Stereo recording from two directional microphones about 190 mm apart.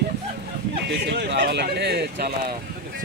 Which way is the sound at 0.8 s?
60° right (ahead or behind).